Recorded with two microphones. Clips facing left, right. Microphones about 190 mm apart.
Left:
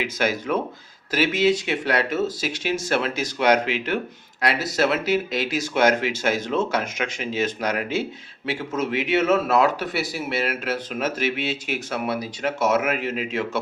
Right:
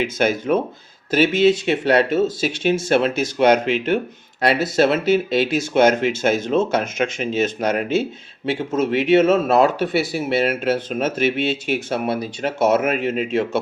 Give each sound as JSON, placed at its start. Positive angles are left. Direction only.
{"t": 0.0, "sound": "speech", "side_deg": -25}